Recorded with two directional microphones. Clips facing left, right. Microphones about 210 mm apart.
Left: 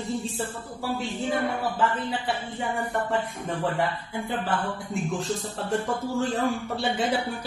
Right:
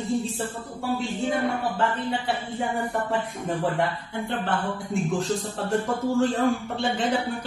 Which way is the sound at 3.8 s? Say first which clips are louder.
Right 1 dB; 5° left (ahead or behind).